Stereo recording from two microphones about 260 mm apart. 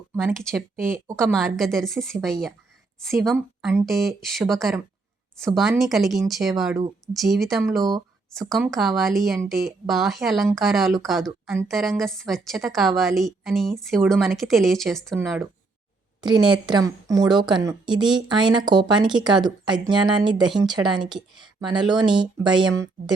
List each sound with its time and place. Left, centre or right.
0.2 s a woman's voice: centre
16.2 s a woman's voice: centre